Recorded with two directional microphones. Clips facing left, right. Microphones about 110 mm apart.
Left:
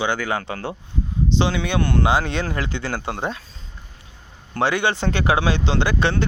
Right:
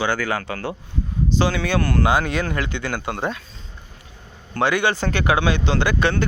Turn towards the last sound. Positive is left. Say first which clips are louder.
# right 1 dB
turn(degrees=30)  # may be behind; listen again after turning